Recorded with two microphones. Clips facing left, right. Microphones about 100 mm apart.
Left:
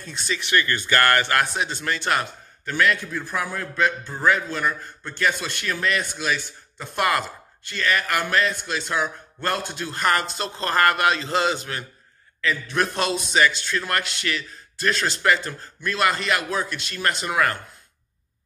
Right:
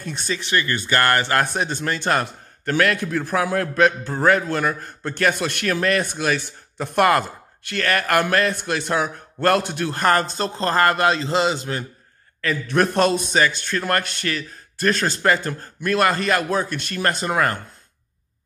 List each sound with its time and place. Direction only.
0.2 s a man's voice: 35° right (ahead or behind)
1.5 s speech: 45° right (ahead or behind)
2.6 s a man's voice: 60° right (ahead or behind)
9.9 s a man's voice: 35° right (ahead or behind)
12.4 s a man's voice: 45° right (ahead or behind)